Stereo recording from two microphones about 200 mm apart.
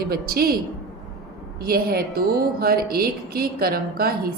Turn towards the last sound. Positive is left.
turn(degrees=-50)  # may be behind; listen again after turning